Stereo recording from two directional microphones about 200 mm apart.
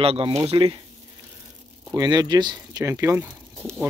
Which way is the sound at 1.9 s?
20° right (ahead or behind).